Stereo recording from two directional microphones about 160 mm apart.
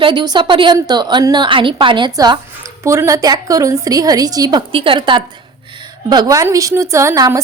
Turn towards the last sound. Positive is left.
turn(degrees=-20)  # may be behind; listen again after turning